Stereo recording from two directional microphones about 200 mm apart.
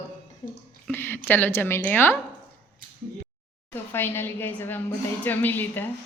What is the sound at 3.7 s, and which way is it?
A woman's voice, 10° left (ahead or behind).